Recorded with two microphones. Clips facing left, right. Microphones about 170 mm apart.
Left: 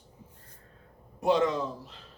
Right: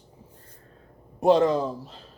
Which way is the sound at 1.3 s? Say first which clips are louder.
Right 6 dB; 35° right (ahead or behind).